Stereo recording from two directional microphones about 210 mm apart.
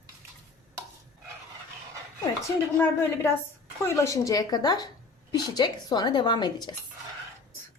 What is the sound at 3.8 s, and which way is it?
A woman's voice, 15° left (ahead or behind).